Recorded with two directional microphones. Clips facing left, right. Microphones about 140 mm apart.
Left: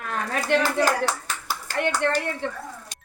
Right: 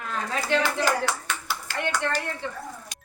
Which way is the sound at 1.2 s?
40° left (ahead or behind).